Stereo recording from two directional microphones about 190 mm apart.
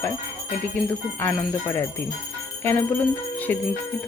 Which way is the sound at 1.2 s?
10° left (ahead or behind).